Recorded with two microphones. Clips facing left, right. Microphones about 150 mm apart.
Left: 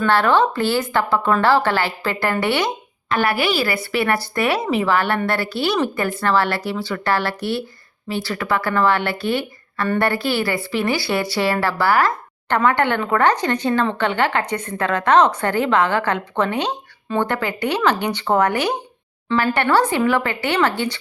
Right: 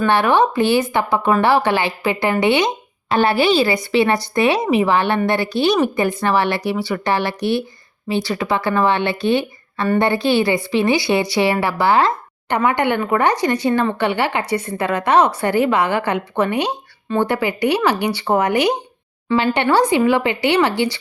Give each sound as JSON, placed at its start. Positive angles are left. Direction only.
{"t": 0.0, "sound": "a woman's voice", "side_deg": -15}